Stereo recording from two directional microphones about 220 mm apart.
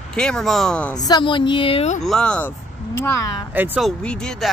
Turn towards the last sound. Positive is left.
turn(degrees=5)  # may be behind; listen again after turning